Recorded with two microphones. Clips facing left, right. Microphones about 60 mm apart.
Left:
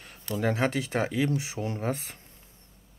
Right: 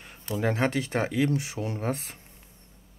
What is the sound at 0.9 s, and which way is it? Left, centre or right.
Speech, centre.